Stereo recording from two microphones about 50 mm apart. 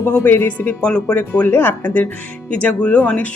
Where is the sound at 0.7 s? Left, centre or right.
Left.